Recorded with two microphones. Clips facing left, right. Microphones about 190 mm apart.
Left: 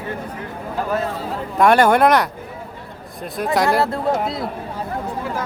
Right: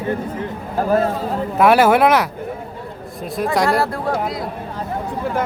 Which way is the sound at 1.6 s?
5° right (ahead or behind).